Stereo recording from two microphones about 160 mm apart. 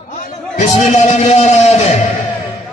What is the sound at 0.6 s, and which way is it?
Music, 45° left (ahead or behind).